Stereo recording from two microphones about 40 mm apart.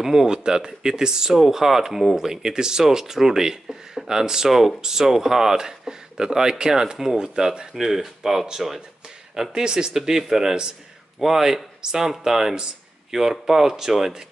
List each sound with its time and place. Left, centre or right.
0.0 s speech: centre